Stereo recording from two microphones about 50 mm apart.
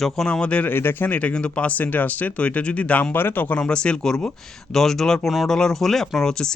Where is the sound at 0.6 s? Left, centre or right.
Left.